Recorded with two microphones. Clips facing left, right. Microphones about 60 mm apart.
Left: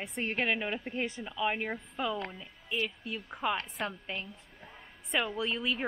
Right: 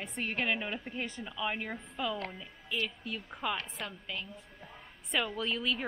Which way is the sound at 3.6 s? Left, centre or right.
Left.